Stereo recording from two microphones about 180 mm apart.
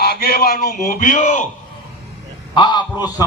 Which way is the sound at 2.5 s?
25° left (ahead or behind).